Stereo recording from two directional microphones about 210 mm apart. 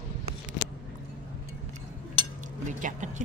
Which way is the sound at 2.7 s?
35° right (ahead or behind).